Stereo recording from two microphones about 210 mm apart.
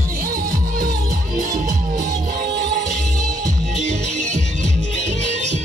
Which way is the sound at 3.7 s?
35° right (ahead or behind).